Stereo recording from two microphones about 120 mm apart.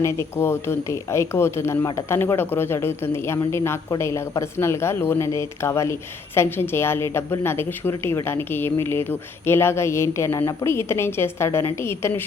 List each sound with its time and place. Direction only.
0.0 s speech: 20° left (ahead or behind)